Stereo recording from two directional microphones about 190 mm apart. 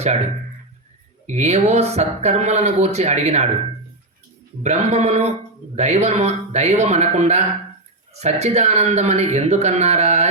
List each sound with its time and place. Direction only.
1.3 s speech: 35° right (ahead or behind)
4.6 s speech: 35° right (ahead or behind)